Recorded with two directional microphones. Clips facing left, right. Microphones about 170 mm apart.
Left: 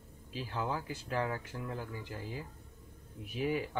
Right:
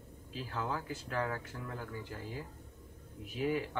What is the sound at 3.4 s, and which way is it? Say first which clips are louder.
Speech: even; 15° left (ahead or behind).